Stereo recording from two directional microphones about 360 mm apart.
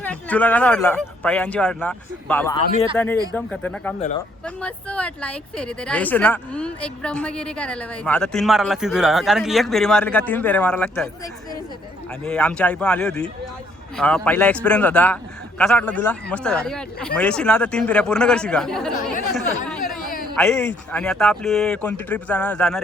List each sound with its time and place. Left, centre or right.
0.0 s speech: centre
12.2 s speech: centre
19.2 s chatter: centre
20.3 s speech: centre